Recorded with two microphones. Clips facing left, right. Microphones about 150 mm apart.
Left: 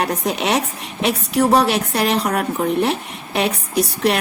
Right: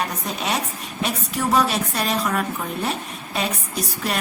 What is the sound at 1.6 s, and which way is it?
A woman's voice, 70° left (ahead or behind).